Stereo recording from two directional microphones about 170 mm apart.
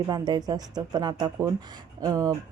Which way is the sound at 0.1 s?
25° right (ahead or behind).